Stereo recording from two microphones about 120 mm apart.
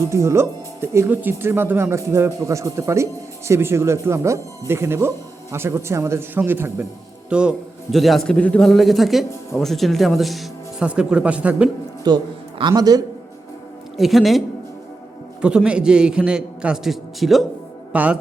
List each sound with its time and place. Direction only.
0.1 s speech: 25° right (ahead or behind)
12.0 s a man's voice: 35° right (ahead or behind)
13.9 s a man's voice: centre (ahead or behind)
17.9 s speech: 10° right (ahead or behind)